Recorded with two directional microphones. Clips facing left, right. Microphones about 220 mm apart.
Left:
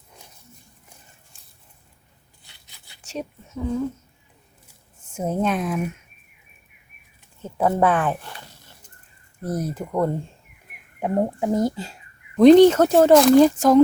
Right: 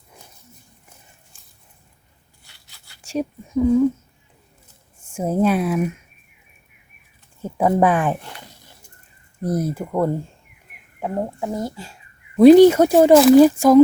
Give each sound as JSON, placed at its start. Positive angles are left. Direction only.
{"t": 1.3, "sound": "a sound", "side_deg": 0}
{"t": 2.4, "sound": "scissors", "side_deg": 20}
{"t": 3.0, "sound": "speech", "side_deg": -10}
{"t": 5.1, "sound": "speech", "side_deg": -10}
{"t": 7.4, "sound": "speech", "side_deg": -10}
{"t": 11.0, "sound": "speech", "side_deg": 20}
{"t": 12.4, "sound": "speech", "side_deg": -10}